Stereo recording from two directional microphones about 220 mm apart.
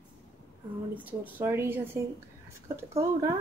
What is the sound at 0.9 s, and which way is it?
Speech, 10° right (ahead or behind).